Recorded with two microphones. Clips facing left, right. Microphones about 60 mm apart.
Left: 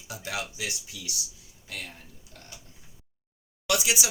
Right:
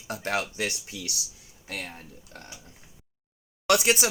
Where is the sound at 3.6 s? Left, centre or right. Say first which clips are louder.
Right 5 dB; right.